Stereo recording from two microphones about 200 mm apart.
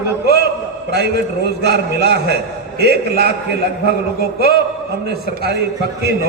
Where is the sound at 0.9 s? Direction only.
55° right (ahead or behind).